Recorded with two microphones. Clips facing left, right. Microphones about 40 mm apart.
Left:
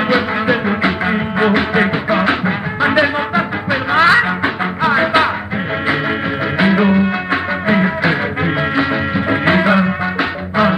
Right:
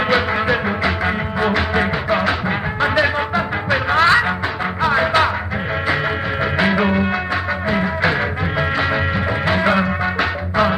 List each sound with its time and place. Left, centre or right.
0.1 s music: centre
1.4 s music: left
6.6 s music: centre
7.6 s music: left
9.3 s music: left
10.5 s music: centre